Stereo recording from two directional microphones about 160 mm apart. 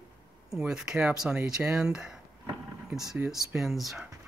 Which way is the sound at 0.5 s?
5° right (ahead or behind).